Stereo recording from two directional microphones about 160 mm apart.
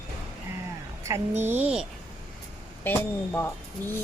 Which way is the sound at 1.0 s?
15° right (ahead or behind).